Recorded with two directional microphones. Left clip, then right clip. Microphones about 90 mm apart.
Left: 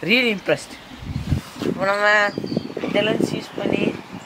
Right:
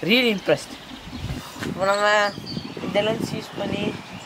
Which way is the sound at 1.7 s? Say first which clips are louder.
Left 2 dB; 15° right (ahead or behind).